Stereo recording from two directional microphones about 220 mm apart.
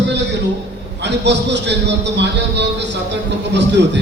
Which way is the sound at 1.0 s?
50° right (ahead or behind).